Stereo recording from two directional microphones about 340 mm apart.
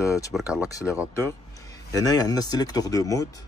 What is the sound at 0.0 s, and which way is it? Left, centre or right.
Speech, centre.